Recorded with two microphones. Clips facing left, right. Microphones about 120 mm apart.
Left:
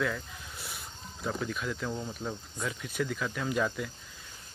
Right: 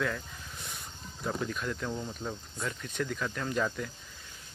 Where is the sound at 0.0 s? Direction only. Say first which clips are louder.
Left 1 dB; 5° left (ahead or behind).